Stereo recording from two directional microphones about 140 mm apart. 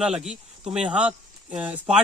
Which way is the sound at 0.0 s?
5° right (ahead or behind).